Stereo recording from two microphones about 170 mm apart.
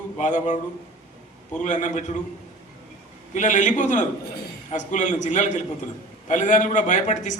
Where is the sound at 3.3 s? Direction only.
45° left (ahead or behind).